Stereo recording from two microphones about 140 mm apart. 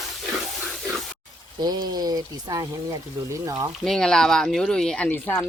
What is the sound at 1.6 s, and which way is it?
Speech, 30° right (ahead or behind).